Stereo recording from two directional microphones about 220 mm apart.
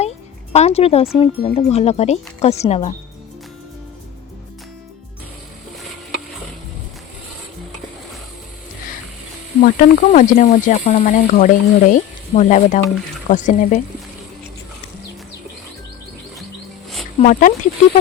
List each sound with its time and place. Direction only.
0.5 s speech: 30° left (ahead or behind)
9.6 s speech: 35° left (ahead or behind)
17.2 s speech: 35° left (ahead or behind)